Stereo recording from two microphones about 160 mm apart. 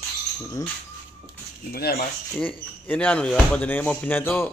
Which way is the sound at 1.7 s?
75° left (ahead or behind).